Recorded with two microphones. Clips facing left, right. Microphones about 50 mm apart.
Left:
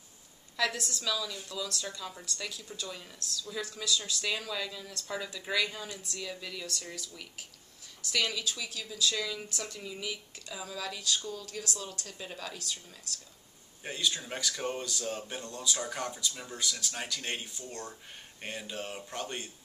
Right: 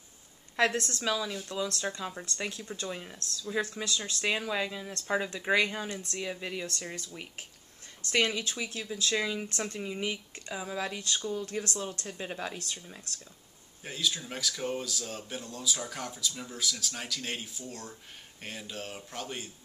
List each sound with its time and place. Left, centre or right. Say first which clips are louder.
0.6 s a woman's voice: right 4 dB; right
1.0 s a woman's voice: right 2 dB; right
8.1 s speech: right 4 dB; right
11.6 s a woman's voice: right 4 dB; right
13.8 s speech: even; centre